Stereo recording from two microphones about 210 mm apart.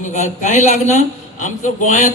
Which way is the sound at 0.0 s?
35° left (ahead or behind).